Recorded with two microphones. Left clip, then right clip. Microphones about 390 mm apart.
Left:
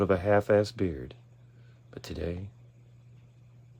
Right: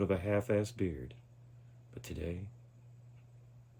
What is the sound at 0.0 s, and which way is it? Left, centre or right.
Speech, centre.